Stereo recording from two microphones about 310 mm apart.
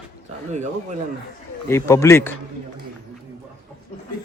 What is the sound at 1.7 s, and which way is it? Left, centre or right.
Speech, centre.